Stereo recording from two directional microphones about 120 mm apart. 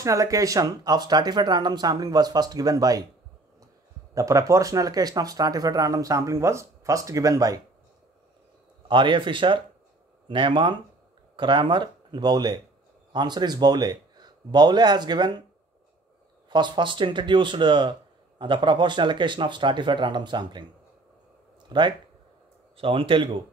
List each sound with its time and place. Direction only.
0.0 s speech: 25° right (ahead or behind)
4.1 s speech: 25° right (ahead or behind)
8.8 s a man's voice: 45° right (ahead or behind)
16.4 s speech: 40° right (ahead or behind)
21.6 s speech: 40° right (ahead or behind)